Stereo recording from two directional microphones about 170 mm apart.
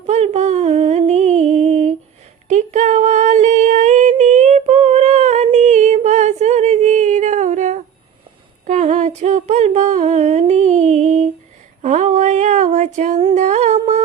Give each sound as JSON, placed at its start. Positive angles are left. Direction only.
{"t": 0.1, "sound": "music", "side_deg": -40}
{"t": 2.5, "sound": "female singing", "side_deg": -45}
{"t": 8.6, "sound": "a sound", "side_deg": -45}